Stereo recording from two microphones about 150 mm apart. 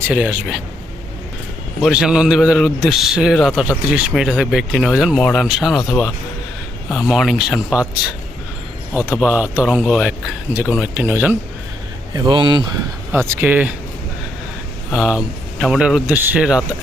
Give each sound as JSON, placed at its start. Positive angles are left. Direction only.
{"t": 0.1, "sound": "speech", "side_deg": -10}
{"t": 1.8, "sound": "a man's voice", "side_deg": -5}
{"t": 7.1, "sound": "a man's voice", "side_deg": 0}
{"t": 9.2, "sound": "speech", "side_deg": -10}
{"t": 12.1, "sound": "speech", "side_deg": -30}
{"t": 13.1, "sound": "speech", "side_deg": -15}
{"t": 14.9, "sound": "a man's voice", "side_deg": -5}